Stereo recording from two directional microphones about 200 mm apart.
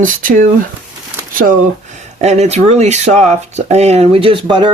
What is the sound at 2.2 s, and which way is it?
Speech, 35° right (ahead or behind).